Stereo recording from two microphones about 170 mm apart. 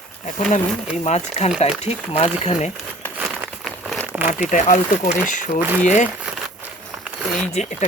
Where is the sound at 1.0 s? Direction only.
40° left (ahead or behind).